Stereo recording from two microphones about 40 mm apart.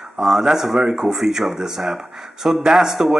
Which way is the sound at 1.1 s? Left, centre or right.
Centre.